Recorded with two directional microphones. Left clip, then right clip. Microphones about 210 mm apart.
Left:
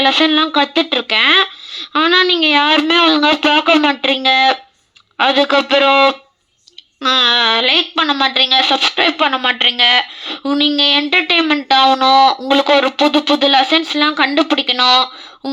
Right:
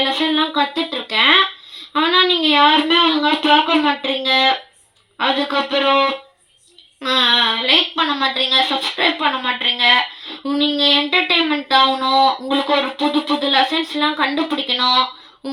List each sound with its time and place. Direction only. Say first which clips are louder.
0.0 s speech: left 5 dB; 25° left (ahead or behind)